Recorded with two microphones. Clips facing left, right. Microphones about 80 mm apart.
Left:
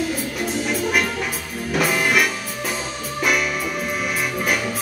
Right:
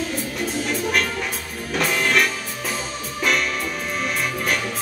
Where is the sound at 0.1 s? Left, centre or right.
Centre.